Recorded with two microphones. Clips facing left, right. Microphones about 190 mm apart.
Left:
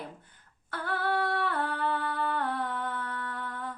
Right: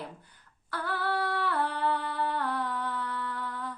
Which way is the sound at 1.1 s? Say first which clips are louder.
Left 2 dB; 45° left (ahead or behind).